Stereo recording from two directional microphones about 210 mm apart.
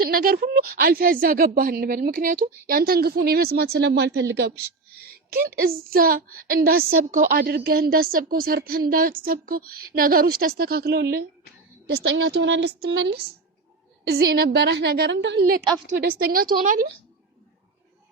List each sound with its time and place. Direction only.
0.1 s a woman's voice: 45° right (ahead or behind)